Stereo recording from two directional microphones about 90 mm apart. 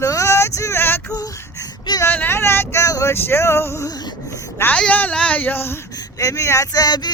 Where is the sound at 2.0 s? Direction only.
25° left (ahead or behind).